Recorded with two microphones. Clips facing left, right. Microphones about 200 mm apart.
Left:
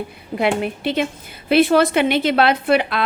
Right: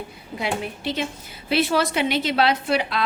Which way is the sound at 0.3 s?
60° left (ahead or behind).